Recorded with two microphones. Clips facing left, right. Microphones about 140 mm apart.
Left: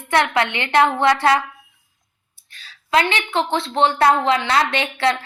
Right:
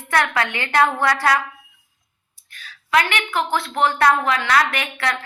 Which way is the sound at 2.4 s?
30° left (ahead or behind).